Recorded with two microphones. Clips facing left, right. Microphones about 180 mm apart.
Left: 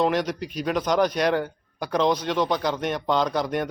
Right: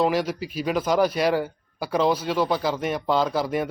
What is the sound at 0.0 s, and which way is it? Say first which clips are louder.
Speech: even; 5° right (ahead or behind).